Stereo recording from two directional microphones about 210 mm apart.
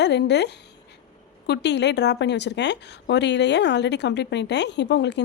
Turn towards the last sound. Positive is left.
turn(degrees=55)  # may be behind; listen again after turning